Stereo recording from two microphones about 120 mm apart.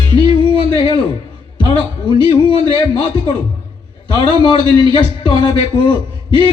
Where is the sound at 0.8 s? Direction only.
40° left (ahead or behind).